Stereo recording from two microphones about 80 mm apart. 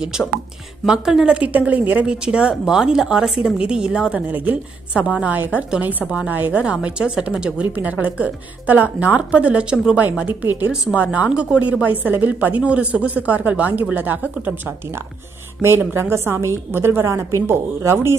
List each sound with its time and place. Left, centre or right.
0.8 s speech: centre
15.8 s a woman's voice: right